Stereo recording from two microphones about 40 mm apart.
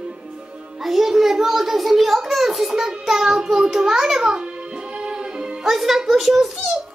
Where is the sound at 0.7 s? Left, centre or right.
Centre.